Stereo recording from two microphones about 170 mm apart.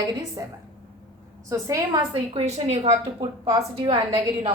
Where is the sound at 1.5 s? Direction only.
20° right (ahead or behind).